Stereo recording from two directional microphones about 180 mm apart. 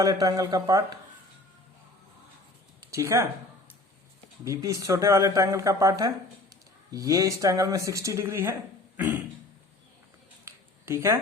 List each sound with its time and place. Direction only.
0.0 s speech: 20° right (ahead or behind)
2.9 s speech: 15° right (ahead or behind)
4.4 s speech: 15° right (ahead or behind)
10.4 s a sound: 15° right (ahead or behind)